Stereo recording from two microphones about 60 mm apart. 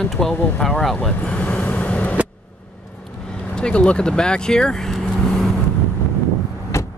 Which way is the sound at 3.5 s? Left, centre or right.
Centre.